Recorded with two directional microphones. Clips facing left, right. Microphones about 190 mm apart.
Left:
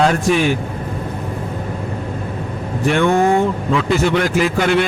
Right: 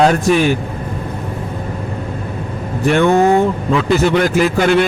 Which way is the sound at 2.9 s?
40° right (ahead or behind).